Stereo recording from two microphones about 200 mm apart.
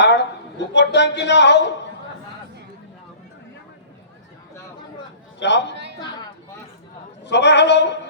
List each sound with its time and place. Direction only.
0.0 s a sound: 60° left (ahead or behind)
0.7 s speech: 60° left (ahead or behind)
5.4 s speech: 60° left (ahead or behind)
7.3 s speech: 60° left (ahead or behind)